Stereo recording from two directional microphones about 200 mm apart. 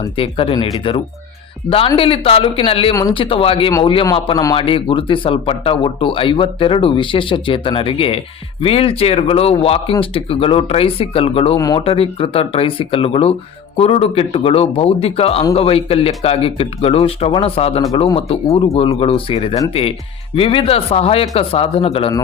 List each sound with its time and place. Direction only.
0.0 s speech: 25° left (ahead or behind)
11.5 s speech: 15° left (ahead or behind)
11.8 s speech: 30° left (ahead or behind)